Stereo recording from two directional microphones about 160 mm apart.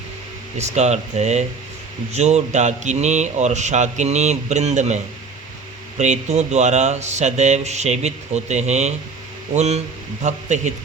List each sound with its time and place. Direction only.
0.6 s speech: 45° right (ahead or behind)
6.0 s speech: 45° right (ahead or behind)